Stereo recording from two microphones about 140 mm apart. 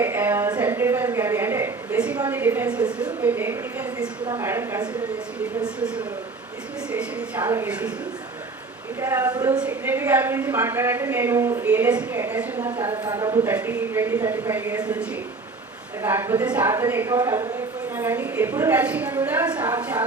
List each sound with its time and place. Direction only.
0.0 s a sound: 15° right (ahead or behind)
4.3 s speech: 20° right (ahead or behind)
6.9 s a sound: 10° right (ahead or behind)
7.4 s speech: 20° right (ahead or behind)
7.7 s a woman's voice: 10° right (ahead or behind)
9.0 s speech: 20° right (ahead or behind)
9.6 s a woman's voice: 15° right (ahead or behind)
13.5 s a woman's voice: 15° right (ahead or behind)
16.0 s a woman's voice: 20° right (ahead or behind)